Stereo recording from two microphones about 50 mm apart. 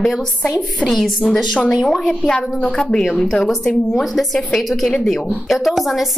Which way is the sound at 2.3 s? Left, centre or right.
Left.